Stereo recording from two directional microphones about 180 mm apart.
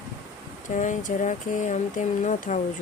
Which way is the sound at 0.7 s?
45° left (ahead or behind).